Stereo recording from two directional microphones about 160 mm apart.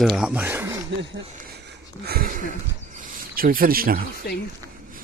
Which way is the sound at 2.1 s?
60° right (ahead or behind).